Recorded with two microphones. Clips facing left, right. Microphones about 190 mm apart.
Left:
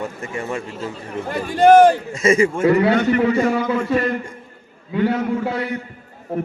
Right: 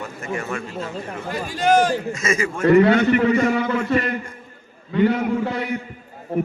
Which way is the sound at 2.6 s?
Centre (ahead or behind).